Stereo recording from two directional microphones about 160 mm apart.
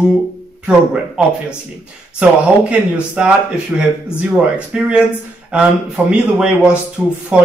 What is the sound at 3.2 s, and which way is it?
A man's voice, 5° right (ahead or behind).